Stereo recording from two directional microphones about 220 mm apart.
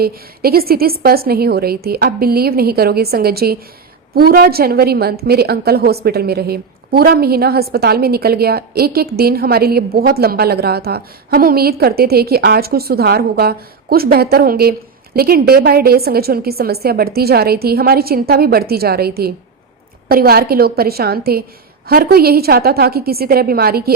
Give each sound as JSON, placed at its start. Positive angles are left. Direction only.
{"t": 0.0, "sound": "a woman's voice", "side_deg": -45}